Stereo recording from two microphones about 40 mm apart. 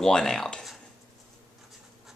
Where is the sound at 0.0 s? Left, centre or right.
Centre.